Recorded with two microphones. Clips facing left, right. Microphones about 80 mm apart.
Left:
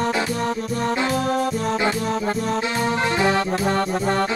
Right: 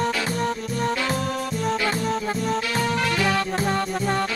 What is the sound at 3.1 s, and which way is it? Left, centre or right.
Music, left.